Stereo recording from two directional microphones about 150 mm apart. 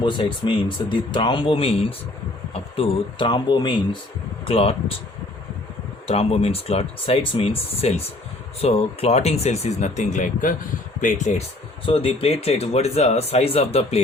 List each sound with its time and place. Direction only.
0.0 s speech: 30° left (ahead or behind)
6.1 s speech: 40° left (ahead or behind); by 10.5 s 60° left (ahead or behind)
11.9 s speech: 40° left (ahead or behind)